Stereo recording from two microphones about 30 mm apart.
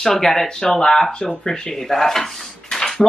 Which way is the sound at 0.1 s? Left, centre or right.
Centre.